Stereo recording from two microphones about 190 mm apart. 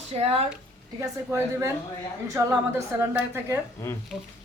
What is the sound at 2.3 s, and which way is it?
A woman's voice, 15° right (ahead or behind).